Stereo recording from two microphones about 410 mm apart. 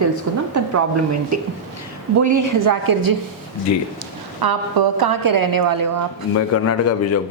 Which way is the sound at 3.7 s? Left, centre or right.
Left.